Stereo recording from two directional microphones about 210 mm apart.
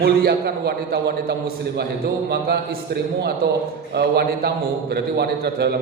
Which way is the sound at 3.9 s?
50° right (ahead or behind).